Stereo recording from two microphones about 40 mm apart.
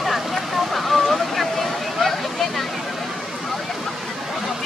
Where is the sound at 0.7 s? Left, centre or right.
Centre.